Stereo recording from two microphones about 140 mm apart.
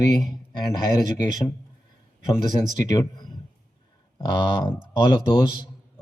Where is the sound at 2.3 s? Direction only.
30° left (ahead or behind).